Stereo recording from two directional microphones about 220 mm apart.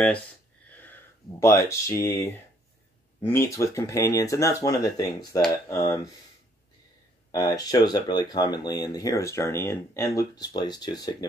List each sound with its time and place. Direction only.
0.7 s speech: 10° left (ahead or behind)
7.2 s speech: 15° left (ahead or behind)